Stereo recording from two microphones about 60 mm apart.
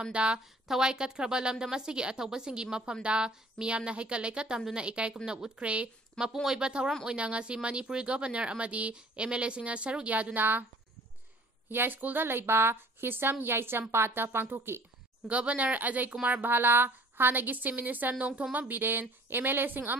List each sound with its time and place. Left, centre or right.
0.0 s speech: centre; by 10.6 s right
11.7 s a woman's voice: right
15.2 s a woman's voice: centre